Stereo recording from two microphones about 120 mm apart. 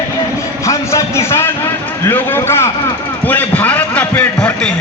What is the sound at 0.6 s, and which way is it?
A man's voice, 25° left (ahead or behind).